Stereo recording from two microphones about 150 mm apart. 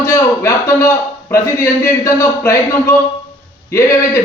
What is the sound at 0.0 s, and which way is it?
A man's voice, 20° left (ahead or behind).